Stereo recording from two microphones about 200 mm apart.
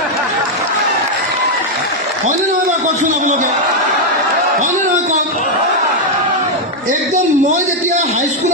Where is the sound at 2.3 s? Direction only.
35° right (ahead or behind).